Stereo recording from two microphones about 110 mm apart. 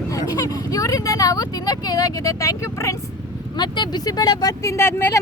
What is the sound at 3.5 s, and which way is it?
Speech, 40° left (ahead or behind).